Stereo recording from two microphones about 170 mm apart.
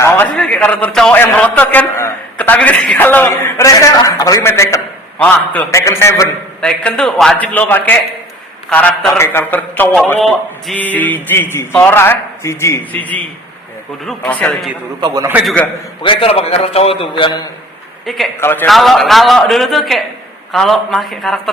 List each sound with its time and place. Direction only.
0.3 s a man's voice: 5° left (ahead or behind)
6.6 s a man's voice: 5° left (ahead or behind)
15.0 s a man's voice: 20° right (ahead or behind)
15.4 s a man's voice: 5° left (ahead or behind)
16.0 s a man's voice: 35° left (ahead or behind)
18.0 s a man's voice: centre (ahead or behind)
18.3 s a man's voice: 10° left (ahead or behind)
18.7 s a man's voice: centre (ahead or behind)